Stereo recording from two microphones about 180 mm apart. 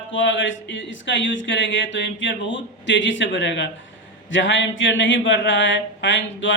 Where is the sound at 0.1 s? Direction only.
90° left.